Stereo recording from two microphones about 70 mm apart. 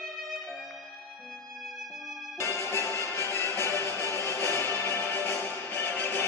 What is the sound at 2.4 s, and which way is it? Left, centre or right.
Music, left.